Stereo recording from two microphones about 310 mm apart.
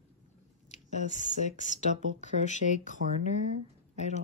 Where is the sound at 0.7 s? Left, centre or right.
Left.